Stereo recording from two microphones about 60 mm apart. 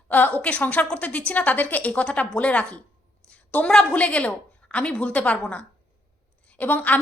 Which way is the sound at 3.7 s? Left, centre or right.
Centre.